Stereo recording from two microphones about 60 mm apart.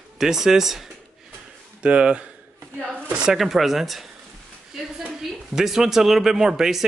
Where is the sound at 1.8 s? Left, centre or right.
Centre.